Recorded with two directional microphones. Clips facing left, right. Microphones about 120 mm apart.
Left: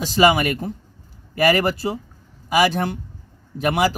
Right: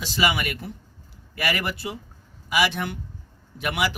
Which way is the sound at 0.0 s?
45° left (ahead or behind).